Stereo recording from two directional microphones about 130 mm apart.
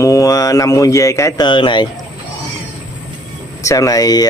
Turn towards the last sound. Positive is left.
turn(degrees=30)  # may be behind; listen again after turning